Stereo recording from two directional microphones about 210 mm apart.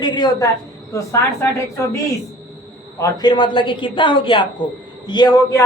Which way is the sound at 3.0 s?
20° left (ahead or behind).